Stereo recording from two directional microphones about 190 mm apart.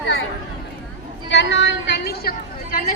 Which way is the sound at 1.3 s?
70° left (ahead or behind).